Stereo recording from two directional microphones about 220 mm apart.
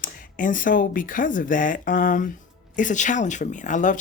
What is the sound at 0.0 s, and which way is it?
Speech, 35° left (ahead or behind).